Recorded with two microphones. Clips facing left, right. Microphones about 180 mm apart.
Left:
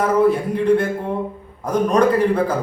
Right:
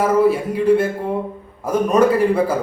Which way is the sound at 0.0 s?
5° right (ahead or behind).